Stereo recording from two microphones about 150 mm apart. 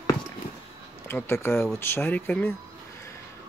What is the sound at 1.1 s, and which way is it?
Speech, 15° left (ahead or behind).